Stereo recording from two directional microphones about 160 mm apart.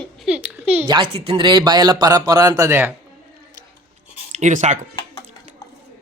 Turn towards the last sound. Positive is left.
turn(degrees=-50)  # may be behind; listen again after turning